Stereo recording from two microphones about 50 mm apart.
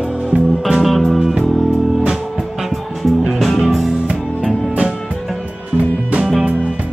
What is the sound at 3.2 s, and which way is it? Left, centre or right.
Music, centre.